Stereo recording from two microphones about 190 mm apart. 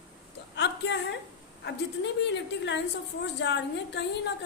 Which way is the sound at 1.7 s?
65° left (ahead or behind).